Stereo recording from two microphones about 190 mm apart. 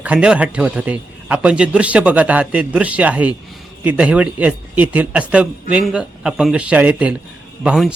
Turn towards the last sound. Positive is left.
turn(degrees=-5)  # may be behind; listen again after turning